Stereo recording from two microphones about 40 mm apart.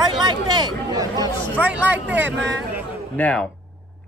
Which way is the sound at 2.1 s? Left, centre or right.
Right.